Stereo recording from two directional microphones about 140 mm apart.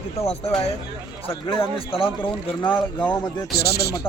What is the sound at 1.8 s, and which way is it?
Speech, 40° left (ahead or behind).